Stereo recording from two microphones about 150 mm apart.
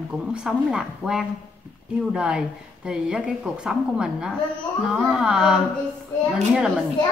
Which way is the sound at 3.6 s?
5° right (ahead or behind).